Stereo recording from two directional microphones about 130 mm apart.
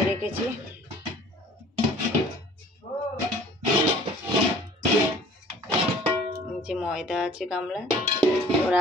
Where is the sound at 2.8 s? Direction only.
60° left (ahead or behind).